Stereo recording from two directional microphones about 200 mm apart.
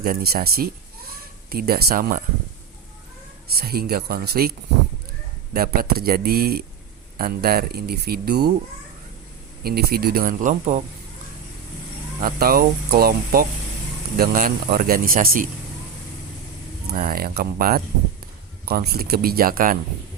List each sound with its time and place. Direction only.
0.0 s speech: 45° right (ahead or behind)
3.5 s speech: 50° right (ahead or behind)
5.5 s speech: 45° right (ahead or behind)
9.6 s speech: 50° right (ahead or behind)
12.2 s speech: 50° right (ahead or behind)
16.8 s speech: 50° right (ahead or behind)